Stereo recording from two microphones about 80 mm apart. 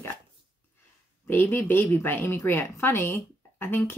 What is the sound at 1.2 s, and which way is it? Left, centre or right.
Speech, left.